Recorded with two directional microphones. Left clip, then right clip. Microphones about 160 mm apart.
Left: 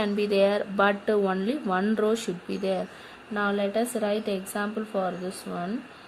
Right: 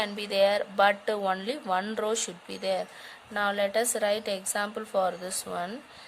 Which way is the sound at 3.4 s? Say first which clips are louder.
Even; 50° right (ahead or behind).